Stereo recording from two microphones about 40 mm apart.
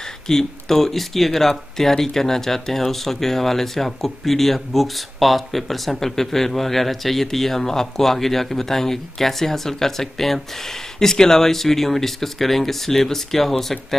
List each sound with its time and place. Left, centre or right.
0.3 s speech: centre